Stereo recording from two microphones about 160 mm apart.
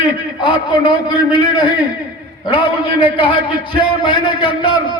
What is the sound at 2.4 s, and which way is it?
A man's voice, 30° left (ahead or behind).